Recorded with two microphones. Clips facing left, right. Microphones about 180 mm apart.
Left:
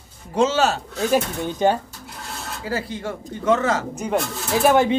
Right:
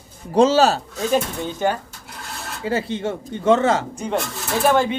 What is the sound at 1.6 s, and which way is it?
Speech, 20° left (ahead or behind).